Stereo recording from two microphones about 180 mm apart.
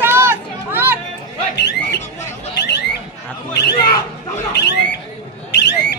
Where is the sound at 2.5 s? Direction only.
70° left (ahead or behind).